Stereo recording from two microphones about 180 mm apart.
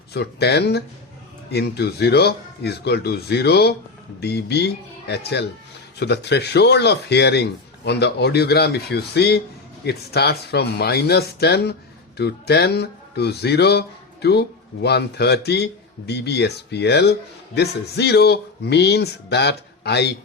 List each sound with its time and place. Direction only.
0.1 s speech: 65° left (ahead or behind)